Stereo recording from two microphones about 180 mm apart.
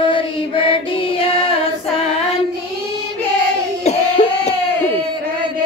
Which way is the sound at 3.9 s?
35° left (ahead or behind).